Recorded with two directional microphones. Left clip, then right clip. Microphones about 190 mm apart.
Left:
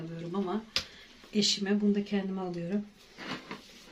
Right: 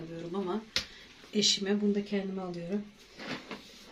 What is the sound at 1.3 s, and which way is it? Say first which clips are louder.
Speech: right 1 dB; 15° left (ahead or behind).